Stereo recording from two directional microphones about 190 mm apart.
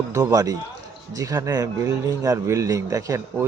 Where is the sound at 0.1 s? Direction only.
20° right (ahead or behind).